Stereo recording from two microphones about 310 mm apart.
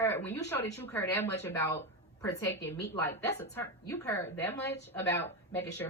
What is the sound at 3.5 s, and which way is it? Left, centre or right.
A woman's voice, centre.